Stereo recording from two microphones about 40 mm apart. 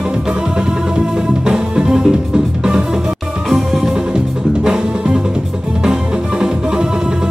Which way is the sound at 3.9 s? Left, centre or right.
Centre.